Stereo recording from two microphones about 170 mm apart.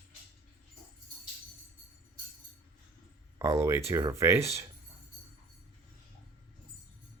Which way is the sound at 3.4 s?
15° right (ahead or behind).